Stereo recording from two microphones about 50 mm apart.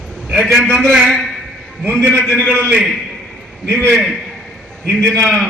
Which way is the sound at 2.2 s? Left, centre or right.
Centre.